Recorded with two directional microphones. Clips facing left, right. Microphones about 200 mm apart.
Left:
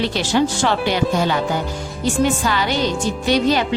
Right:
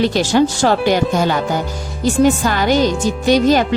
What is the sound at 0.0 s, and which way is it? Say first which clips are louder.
A woman's voice: right 4 dB; 45° right (ahead or behind).